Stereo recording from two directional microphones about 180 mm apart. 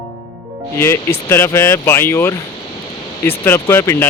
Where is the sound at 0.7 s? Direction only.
15° left (ahead or behind).